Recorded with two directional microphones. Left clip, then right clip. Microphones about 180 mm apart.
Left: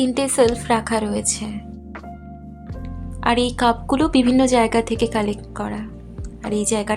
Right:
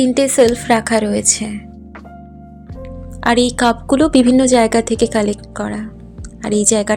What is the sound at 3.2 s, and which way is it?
A woman's voice, 20° right (ahead or behind).